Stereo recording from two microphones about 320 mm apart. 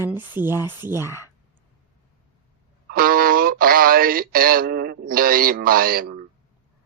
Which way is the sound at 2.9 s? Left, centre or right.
Right.